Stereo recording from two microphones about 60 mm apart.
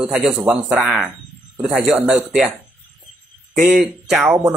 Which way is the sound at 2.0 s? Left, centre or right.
Centre.